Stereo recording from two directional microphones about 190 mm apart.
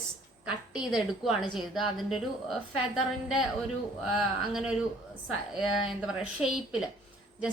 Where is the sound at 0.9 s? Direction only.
Centre (ahead or behind).